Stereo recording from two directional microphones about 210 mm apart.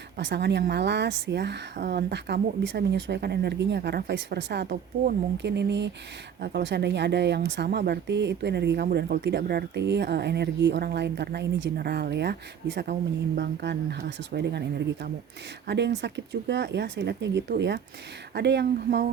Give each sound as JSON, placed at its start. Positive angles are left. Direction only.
{"t": 0.2, "sound": "speech", "side_deg": -50}